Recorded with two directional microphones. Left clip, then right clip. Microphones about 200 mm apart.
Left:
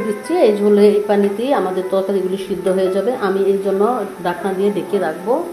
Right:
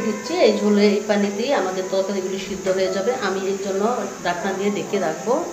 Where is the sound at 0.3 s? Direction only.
55° left (ahead or behind).